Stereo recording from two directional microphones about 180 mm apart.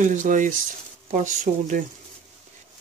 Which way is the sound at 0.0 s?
45° right (ahead or behind).